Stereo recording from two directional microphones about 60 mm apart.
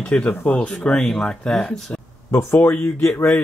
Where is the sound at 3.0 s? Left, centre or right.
Left.